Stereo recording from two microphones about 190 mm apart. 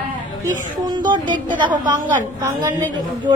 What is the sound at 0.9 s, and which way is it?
Speech, 25° right (ahead or behind).